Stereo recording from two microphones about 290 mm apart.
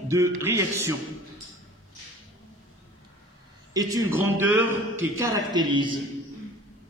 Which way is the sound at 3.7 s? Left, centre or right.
Centre.